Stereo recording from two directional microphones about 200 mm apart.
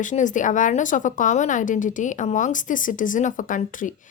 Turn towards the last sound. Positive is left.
turn(degrees=40)  # may be behind; listen again after turning